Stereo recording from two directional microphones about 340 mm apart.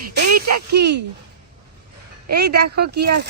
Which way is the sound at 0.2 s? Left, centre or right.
Right.